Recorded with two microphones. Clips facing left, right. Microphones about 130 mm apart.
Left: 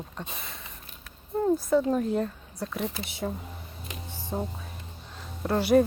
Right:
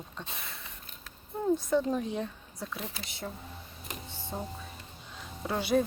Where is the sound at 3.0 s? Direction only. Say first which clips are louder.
Left 7 dB; 10° left (ahead or behind).